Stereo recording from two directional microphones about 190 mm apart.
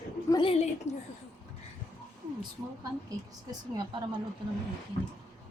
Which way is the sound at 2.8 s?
20° right (ahead or behind).